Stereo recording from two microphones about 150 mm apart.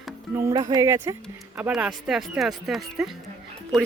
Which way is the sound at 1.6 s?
5° right (ahead or behind).